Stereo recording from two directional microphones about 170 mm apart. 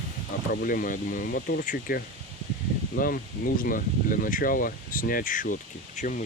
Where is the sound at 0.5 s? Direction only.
55° left (ahead or behind).